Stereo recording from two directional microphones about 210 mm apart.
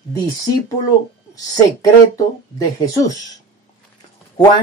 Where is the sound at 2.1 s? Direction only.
15° left (ahead or behind).